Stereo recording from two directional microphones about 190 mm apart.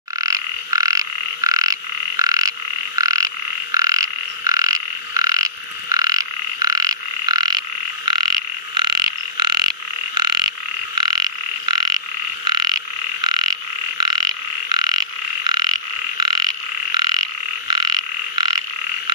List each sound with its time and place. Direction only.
0.2 s frog: 20° right (ahead or behind)
17.6 s frog: 20° right (ahead or behind)